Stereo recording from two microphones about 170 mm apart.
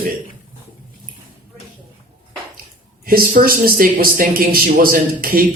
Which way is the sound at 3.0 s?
60° right (ahead or behind).